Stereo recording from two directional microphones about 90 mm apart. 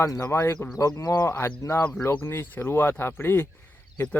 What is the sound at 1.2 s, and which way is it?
Speech, 30° left (ahead or behind).